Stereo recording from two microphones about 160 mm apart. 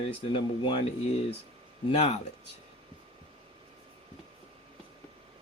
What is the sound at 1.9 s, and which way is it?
Speech, 40° left (ahead or behind).